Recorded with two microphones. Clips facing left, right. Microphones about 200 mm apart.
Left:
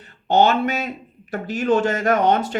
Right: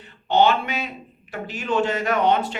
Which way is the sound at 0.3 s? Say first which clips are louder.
Left 2 dB; 45° left (ahead or behind).